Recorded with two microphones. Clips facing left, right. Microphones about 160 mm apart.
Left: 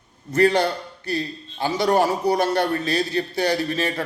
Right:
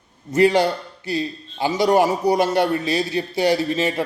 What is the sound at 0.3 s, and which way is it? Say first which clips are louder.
A man's voice: right 2 dB; 20° right (ahead or behind).